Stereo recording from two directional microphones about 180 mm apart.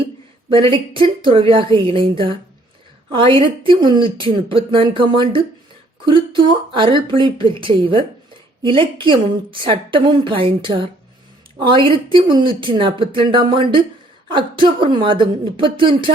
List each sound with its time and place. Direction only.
0.5 s speech: 30° right (ahead or behind)